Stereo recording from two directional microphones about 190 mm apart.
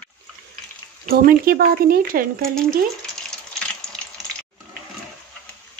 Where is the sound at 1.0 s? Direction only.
50° right (ahead or behind).